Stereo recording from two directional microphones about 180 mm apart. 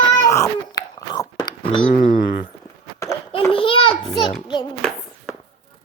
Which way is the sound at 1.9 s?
45° left (ahead or behind).